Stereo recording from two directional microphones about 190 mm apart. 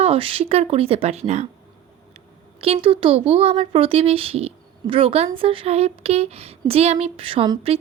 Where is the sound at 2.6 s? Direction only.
30° right (ahead or behind).